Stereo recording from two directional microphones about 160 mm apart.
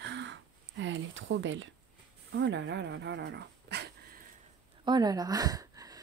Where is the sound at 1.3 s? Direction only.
90° right.